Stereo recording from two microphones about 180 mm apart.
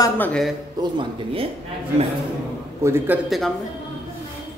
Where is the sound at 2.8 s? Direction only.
15° right (ahead or behind).